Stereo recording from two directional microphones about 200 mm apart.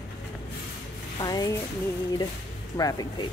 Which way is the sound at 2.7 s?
20° left (ahead or behind).